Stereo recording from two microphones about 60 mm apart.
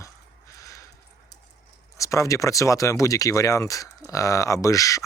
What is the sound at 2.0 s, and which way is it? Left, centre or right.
Speech, left.